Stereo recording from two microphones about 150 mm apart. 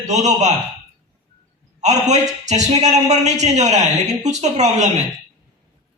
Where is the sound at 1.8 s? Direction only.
50° right (ahead or behind).